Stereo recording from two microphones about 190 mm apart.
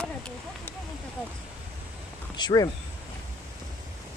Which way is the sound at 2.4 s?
20° left (ahead or behind).